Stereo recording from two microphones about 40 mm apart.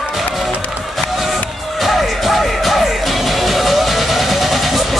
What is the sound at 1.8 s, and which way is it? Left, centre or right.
Music, centre.